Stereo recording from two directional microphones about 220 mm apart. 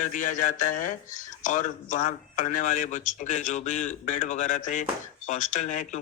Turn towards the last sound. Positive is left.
turn(degrees=35)  # may be behind; listen again after turning